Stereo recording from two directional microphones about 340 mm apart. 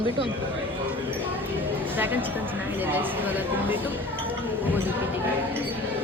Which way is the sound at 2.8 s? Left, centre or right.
Centre.